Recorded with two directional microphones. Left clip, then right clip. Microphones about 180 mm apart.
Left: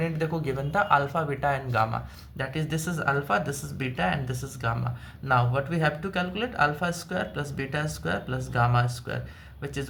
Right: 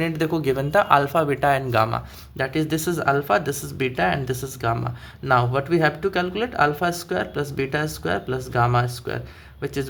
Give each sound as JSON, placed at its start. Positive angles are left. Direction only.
{"t": 0.0, "sound": "speech", "side_deg": -55}